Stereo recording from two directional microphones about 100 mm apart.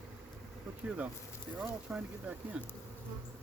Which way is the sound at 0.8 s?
10° right (ahead or behind).